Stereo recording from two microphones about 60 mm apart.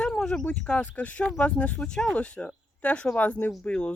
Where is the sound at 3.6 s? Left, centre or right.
Centre.